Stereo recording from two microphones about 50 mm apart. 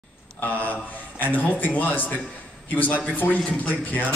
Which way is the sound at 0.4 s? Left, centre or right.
Left.